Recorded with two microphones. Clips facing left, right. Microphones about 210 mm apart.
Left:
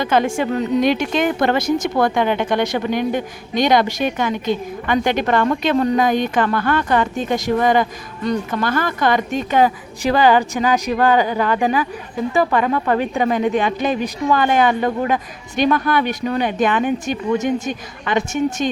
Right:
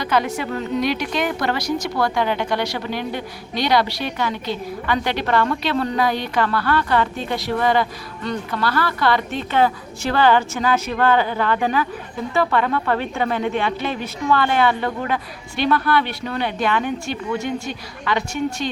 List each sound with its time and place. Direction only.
0.0 s speech: 25° left (ahead or behind)